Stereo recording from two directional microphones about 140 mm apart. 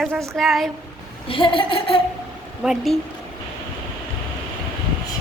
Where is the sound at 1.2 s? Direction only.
40° left (ahead or behind).